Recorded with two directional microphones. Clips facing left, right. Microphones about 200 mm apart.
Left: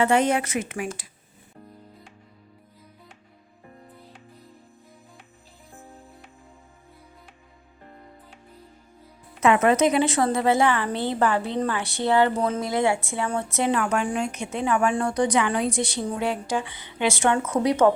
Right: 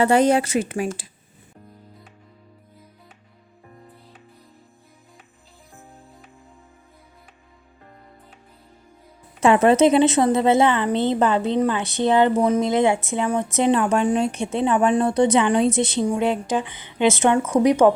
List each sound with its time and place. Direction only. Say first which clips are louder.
0.0 s speech: right 4 dB; 35° right (ahead or behind)
9.4 s a woman's voice: right 4 dB; 30° right (ahead or behind)